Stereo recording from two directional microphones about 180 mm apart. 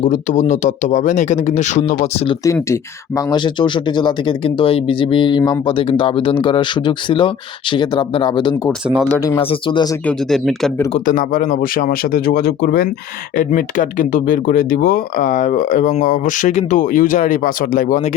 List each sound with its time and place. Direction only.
0.0 s speech: 40° left (ahead or behind)
2.4 s speech: 15° left (ahead or behind)
9.1 s speech: 10° left (ahead or behind)
9.4 s speech: 30° left (ahead or behind)
10.1 s speech: centre (ahead or behind)
10.9 s speech: 45° left (ahead or behind)
13.3 s speech: 50° left (ahead or behind)